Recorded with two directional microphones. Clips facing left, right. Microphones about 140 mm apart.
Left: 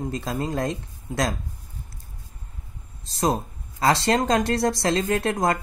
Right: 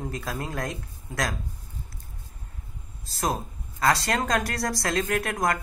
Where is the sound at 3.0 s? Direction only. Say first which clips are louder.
Left 5 dB; 20° left (ahead or behind).